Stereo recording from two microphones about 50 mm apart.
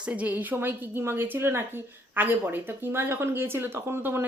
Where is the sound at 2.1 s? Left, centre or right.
Right.